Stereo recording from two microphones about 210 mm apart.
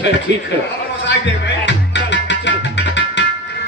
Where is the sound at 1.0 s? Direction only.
55° left (ahead or behind).